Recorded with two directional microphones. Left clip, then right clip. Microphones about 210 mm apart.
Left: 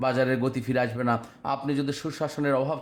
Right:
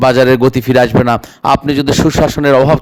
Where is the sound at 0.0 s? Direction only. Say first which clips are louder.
Right 17 dB; 45° right (ahead or behind).